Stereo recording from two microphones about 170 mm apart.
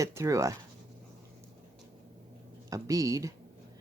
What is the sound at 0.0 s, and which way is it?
Speech, 20° right (ahead or behind).